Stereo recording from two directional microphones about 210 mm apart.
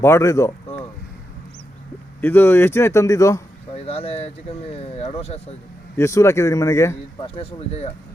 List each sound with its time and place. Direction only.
0.0 s speech: 15° left (ahead or behind)
2.2 s speech: 10° left (ahead or behind)
3.8 s speech: 25° left (ahead or behind)
6.0 s speech: 15° left (ahead or behind)
7.3 s speech: 30° left (ahead or behind)